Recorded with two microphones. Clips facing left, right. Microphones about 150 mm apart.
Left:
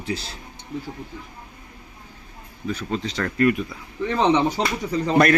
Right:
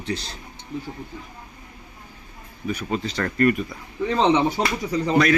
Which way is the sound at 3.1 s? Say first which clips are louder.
Even; centre (ahead or behind).